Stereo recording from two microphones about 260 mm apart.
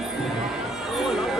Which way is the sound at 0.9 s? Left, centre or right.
Centre.